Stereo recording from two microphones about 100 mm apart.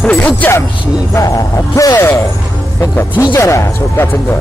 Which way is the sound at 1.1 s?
35° left (ahead or behind).